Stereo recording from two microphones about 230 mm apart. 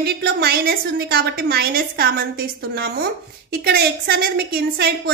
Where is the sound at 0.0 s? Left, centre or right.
Right.